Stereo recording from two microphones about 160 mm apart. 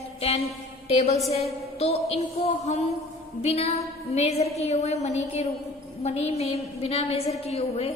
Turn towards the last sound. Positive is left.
turn(degrees=40)  # may be behind; listen again after turning